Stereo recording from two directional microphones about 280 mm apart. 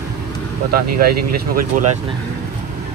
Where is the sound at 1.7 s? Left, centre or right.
Right.